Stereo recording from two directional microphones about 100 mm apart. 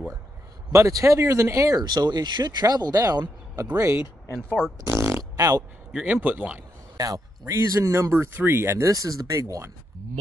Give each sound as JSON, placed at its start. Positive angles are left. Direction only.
{"t": 0.7, "sound": "speech", "side_deg": -30}
{"t": 1.8, "sound": "speech", "side_deg": -45}
{"t": 4.8, "sound": "fart", "side_deg": -30}
{"t": 5.9, "sound": "a sound", "side_deg": -5}
{"t": 6.1, "sound": "speech", "side_deg": -20}
{"t": 7.0, "sound": "speech", "side_deg": -35}
{"t": 8.9, "sound": "speech", "side_deg": -35}